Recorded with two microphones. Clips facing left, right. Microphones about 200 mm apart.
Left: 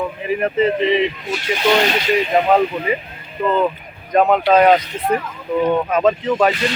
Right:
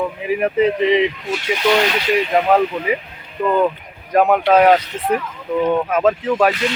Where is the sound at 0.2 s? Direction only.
10° right (ahead or behind).